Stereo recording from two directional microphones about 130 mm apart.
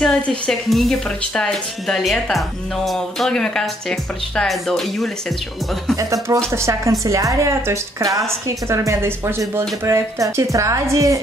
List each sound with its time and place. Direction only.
0.0 s a woman's voice: 5° left (ahead or behind)
5.9 s a woman's voice: 25° right (ahead or behind)